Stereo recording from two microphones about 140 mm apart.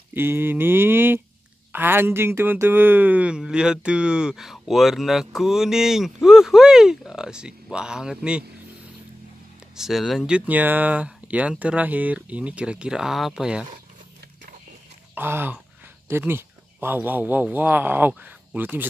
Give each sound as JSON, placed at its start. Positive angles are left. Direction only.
{"t": 0.1, "sound": "a sound", "side_deg": -15}
{"t": 1.7, "sound": "speech", "side_deg": -15}
{"t": 9.8, "sound": "speech", "side_deg": 0}
{"t": 15.1, "sound": "a man's voice", "side_deg": -15}